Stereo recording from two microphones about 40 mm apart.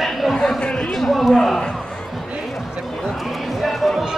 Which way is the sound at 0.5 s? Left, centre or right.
Left.